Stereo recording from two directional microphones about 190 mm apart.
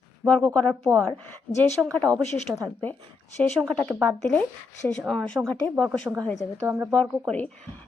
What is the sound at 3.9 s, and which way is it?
Speech, 5° left (ahead or behind).